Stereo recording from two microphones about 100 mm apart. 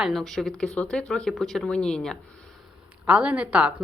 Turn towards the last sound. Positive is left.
turn(degrees=-15)  # may be behind; listen again after turning